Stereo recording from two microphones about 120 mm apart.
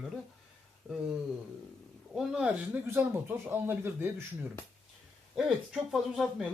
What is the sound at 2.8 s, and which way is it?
Speech, 20° right (ahead or behind).